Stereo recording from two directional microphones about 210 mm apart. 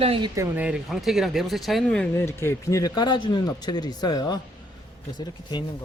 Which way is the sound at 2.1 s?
10° left (ahead or behind).